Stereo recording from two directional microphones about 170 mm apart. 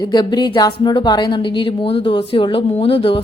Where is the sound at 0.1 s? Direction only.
25° left (ahead or behind).